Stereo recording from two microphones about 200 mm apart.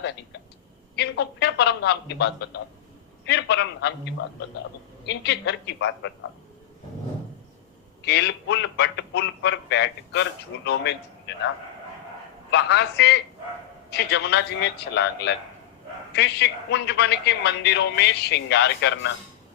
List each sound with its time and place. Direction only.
0.9 s a man's voice: 55° left (ahead or behind)
5.0 s a man's voice: 55° left (ahead or behind)
8.0 s a man's voice: 55° left (ahead or behind)
12.5 s a man's voice: 60° left (ahead or behind)